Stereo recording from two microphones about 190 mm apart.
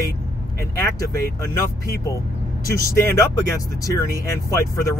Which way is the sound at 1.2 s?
15° left (ahead or behind).